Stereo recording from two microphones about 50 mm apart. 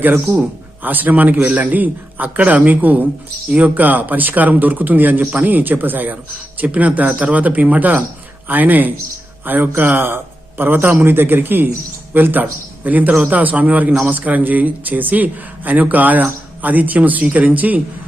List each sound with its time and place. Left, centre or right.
0.3 s a man's voice: right